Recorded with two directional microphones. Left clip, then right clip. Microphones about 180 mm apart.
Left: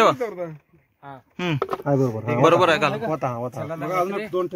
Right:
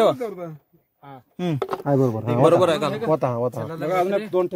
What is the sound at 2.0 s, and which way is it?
Speech, 20° right (ahead or behind).